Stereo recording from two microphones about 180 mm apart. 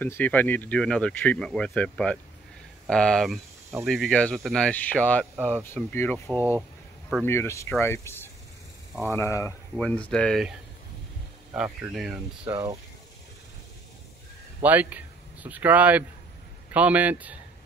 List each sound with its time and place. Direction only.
0.0 s speech: 10° left (ahead or behind)
11.5 s speech: 5° right (ahead or behind)
14.6 s speech: 10° right (ahead or behind)